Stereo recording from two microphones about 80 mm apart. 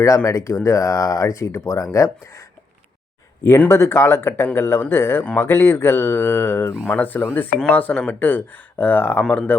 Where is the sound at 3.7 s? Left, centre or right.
Left.